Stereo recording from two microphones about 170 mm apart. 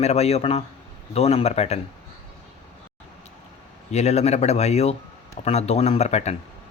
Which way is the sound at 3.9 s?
40° left (ahead or behind).